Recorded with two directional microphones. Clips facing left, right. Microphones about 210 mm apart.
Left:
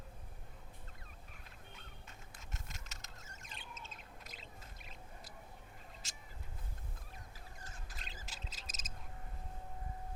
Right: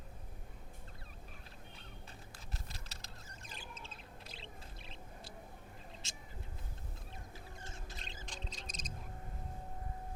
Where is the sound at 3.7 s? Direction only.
30° right (ahead or behind).